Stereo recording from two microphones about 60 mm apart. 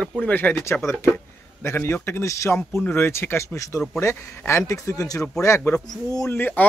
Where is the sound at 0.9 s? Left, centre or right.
Left.